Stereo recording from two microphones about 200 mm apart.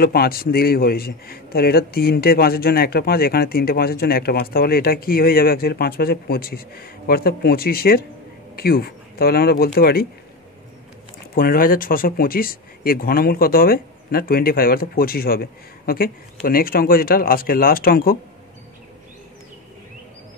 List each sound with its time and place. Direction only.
0.0 s a man's voice: 50° left (ahead or behind)
11.3 s a man's voice: 45° left (ahead or behind)